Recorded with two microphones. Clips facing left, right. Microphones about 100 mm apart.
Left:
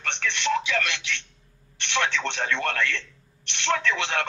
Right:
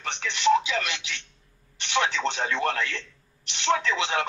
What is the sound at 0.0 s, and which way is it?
Radio, 15° right (ahead or behind).